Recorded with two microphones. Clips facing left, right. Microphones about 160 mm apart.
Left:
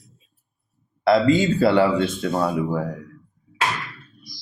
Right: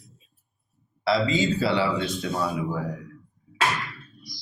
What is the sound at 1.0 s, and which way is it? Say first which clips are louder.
A man's voice: left 6 dB; 50° left (ahead or behind).